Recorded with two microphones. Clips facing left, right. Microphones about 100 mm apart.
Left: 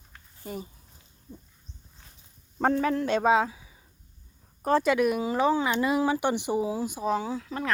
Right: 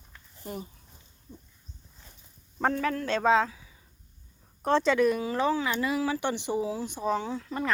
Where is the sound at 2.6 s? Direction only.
30° left (ahead or behind).